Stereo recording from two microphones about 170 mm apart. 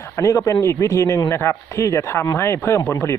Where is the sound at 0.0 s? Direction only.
20° left (ahead or behind).